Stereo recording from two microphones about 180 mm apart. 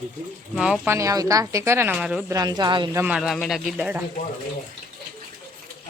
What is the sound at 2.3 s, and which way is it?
Speech, 20° right (ahead or behind).